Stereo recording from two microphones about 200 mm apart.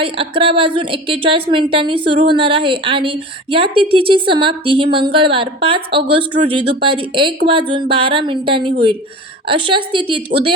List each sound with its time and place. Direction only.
0.0 s a woman's voice: 25° right (ahead or behind)
5.7 s a woman's voice: 55° right (ahead or behind)
6.1 s a woman's voice: 25° right (ahead or behind)